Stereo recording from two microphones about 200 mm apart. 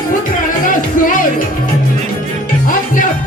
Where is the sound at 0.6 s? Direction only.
40° left (ahead or behind).